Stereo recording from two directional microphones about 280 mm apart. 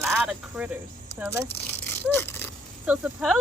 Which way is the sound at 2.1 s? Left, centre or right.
Centre.